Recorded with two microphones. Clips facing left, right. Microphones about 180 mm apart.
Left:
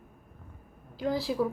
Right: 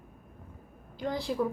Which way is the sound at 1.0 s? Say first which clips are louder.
Left 2 dB; 5° left (ahead or behind).